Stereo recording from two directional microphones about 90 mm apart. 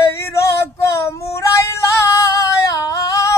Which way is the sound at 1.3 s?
35° left (ahead or behind).